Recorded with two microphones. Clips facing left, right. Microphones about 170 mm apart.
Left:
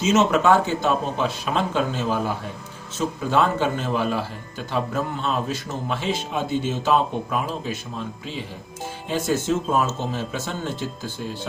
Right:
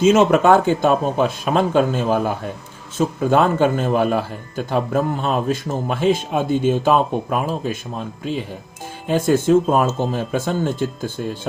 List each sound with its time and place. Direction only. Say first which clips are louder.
0.0 s speech: right 5 dB; 55° right (ahead or behind)